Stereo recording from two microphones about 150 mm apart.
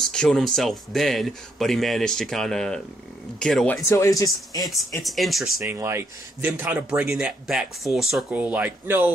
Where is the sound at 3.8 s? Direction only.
20° left (ahead or behind).